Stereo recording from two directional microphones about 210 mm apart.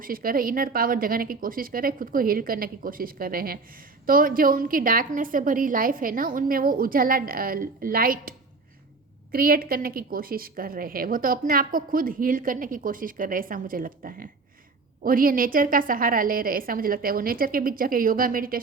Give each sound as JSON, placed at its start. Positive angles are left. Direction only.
{"t": 0.0, "sound": "a woman's voice", "side_deg": -45}
{"t": 9.3, "sound": "a woman's voice", "side_deg": -45}